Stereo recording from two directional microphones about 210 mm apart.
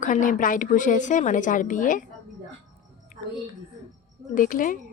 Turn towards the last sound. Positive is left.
turn(degrees=40)  # may be behind; listen again after turning